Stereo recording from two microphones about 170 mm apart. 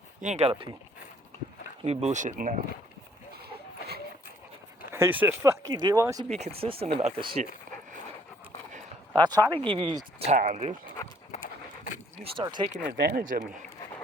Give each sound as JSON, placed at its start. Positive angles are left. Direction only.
{"t": 0.2, "sound": "speech", "side_deg": -40}
{"t": 0.5, "sound": "speech", "side_deg": -20}
{"t": 1.8, "sound": "speech", "side_deg": -40}
{"t": 4.9, "sound": "speech", "side_deg": -15}
{"t": 6.3, "sound": "speech", "side_deg": -35}
{"t": 9.1, "sound": "speech", "side_deg": -25}
{"t": 10.2, "sound": "speech", "side_deg": -45}
{"t": 12.2, "sound": "speech", "side_deg": -30}
{"t": 12.9, "sound": "speech", "side_deg": -65}